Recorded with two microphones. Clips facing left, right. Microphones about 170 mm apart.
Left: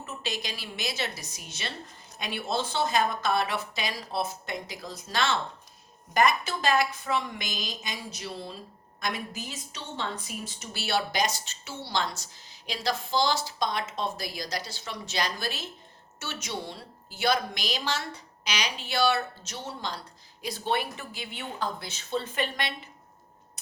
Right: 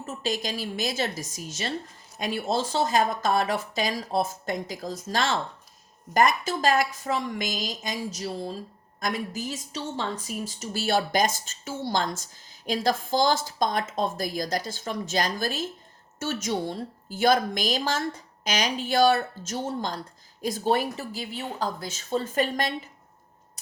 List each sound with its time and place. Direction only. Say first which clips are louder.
0.0 s a woman's voice: right 6 dB; 45° right (ahead or behind)